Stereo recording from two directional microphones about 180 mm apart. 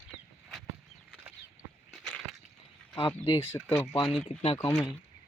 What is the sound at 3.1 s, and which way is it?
Speech, 20° left (ahead or behind).